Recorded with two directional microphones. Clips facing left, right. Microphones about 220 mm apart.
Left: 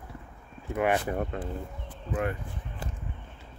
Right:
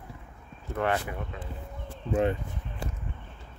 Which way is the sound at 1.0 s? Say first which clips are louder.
Left 7 dB; 45° left (ahead or behind).